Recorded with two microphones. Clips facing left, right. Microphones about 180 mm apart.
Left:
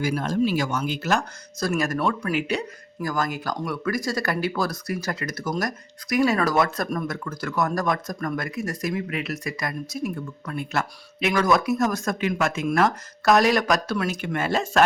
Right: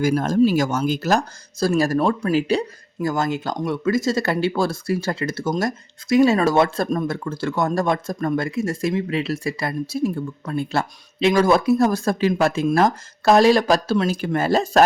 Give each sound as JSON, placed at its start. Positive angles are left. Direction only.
{"t": 0.0, "sound": "speech", "side_deg": -45}